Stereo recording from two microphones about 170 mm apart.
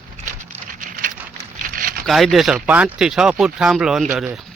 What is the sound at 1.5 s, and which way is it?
Crumpling, 55° right (ahead or behind).